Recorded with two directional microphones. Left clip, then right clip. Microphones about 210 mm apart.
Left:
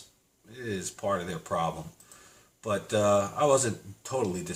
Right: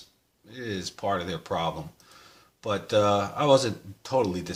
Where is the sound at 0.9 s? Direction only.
40° right (ahead or behind).